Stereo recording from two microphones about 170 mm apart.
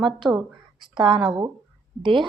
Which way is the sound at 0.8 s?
30° right (ahead or behind).